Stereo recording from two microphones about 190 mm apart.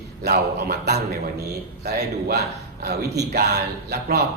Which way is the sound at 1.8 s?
55° right (ahead or behind).